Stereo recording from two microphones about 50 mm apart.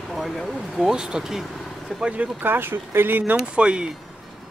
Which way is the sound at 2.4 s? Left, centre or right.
Right.